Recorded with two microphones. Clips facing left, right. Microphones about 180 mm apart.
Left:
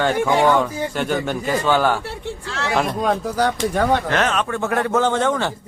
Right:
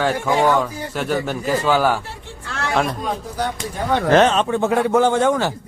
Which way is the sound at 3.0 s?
80° left.